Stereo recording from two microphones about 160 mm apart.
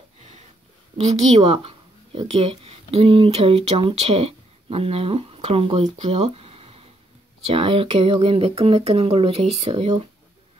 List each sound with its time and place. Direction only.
0.9 s speech: 40° right (ahead or behind)